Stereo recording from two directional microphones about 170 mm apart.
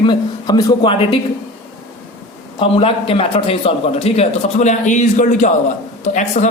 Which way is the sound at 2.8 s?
35° left (ahead or behind).